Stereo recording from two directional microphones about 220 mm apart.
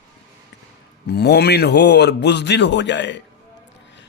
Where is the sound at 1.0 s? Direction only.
50° left (ahead or behind).